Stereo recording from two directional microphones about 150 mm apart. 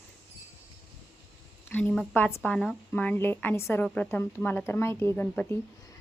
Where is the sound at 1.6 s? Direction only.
10° left (ahead or behind).